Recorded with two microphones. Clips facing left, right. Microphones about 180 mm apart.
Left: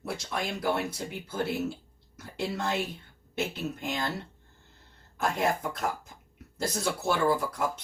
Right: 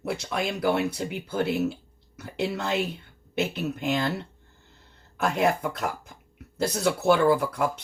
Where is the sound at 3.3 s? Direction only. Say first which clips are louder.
Right 5 dB; 65° right (ahead or behind).